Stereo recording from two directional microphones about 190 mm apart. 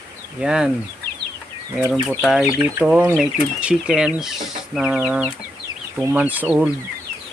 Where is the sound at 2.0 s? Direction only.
Centre (ahead or behind).